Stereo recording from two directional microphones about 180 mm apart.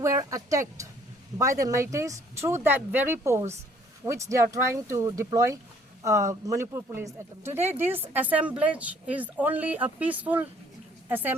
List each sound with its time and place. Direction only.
0.0 s speech: 15° right (ahead or behind)